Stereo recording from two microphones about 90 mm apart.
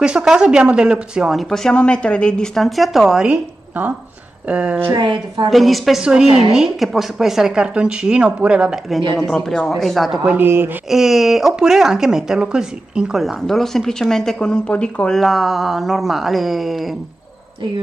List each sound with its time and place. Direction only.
0.0 s speech: 5° right (ahead or behind)
3.3 s a woman's voice: 20° right (ahead or behind)
4.9 s a woman's voice: 70° right (ahead or behind)
5.5 s speech: centre (ahead or behind)
9.2 s speech: 5° left (ahead or behind)
10.3 s a man's voice: 25° right (ahead or behind)
10.9 s speech: 5° right (ahead or behind)